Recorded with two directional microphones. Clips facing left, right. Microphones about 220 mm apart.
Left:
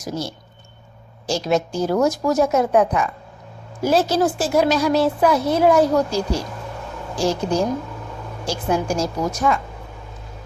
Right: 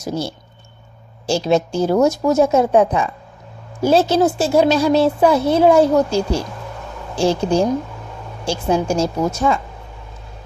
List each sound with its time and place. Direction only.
0.0 s speech: 30° right (ahead or behind)